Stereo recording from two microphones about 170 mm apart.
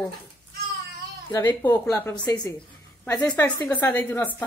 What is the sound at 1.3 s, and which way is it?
A child's voice, 10° left (ahead or behind).